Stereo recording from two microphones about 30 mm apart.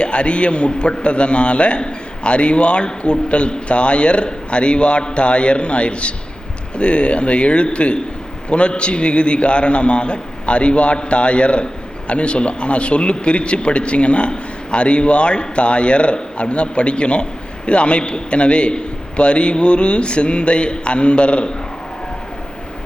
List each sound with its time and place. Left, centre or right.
0.0 s a man's voice: left